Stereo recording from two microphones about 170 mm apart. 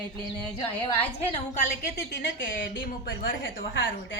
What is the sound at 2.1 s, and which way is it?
A woman's voice, 90° left.